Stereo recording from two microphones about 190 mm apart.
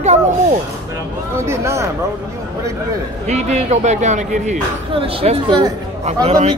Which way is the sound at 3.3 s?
35° right (ahead or behind).